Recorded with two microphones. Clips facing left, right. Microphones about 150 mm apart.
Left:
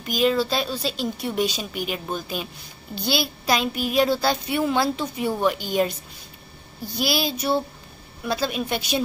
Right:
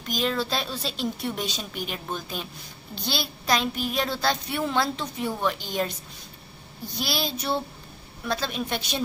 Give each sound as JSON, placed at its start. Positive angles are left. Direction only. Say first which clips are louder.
{"t": 0.0, "sound": "a woman's voice", "louder": "left 6 dB", "side_deg": 5}
{"t": 2.9, "sound": "child singing", "louder": "left 6 dB", "side_deg": 5}
{"t": 7.0, "sound": "child singing", "louder": "left 5 dB", "side_deg": 5}